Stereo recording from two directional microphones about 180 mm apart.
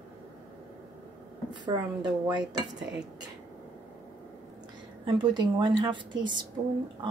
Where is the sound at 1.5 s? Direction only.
25° right (ahead or behind).